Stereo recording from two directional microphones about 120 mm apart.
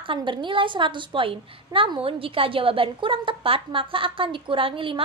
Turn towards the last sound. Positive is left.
turn(degrees=-45)  # may be behind; listen again after turning